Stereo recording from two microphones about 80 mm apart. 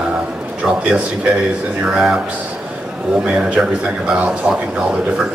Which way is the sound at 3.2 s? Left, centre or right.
Centre.